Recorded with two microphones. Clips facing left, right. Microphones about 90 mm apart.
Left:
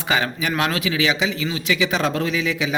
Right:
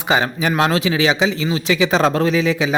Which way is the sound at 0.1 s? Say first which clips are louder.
Right 4 dB; 25° right (ahead or behind).